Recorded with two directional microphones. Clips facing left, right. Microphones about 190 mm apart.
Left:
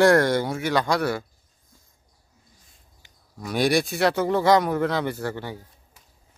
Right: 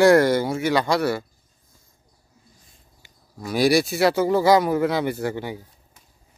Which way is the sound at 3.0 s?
5° right (ahead or behind).